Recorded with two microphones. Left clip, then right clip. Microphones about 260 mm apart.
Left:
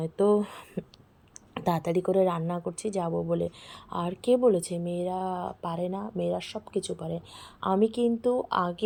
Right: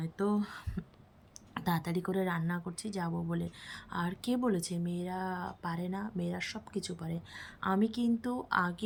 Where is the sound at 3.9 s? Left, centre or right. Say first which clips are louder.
Left 10 dB; centre.